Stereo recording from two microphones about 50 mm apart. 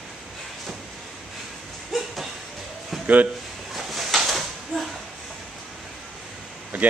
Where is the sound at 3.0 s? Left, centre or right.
Right.